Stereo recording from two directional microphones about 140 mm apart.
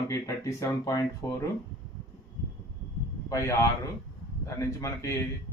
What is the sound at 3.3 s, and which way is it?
Speech, 25° left (ahead or behind).